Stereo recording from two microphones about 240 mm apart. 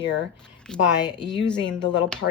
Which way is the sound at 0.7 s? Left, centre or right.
Centre.